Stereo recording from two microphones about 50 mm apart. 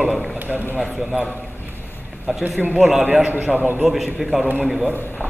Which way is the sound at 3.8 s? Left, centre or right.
Centre.